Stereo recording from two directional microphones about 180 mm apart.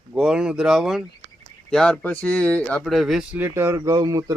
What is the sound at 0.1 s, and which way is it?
Speech, 5° right (ahead or behind).